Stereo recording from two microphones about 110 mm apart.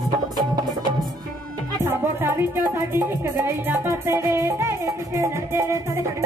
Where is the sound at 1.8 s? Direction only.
20° right (ahead or behind).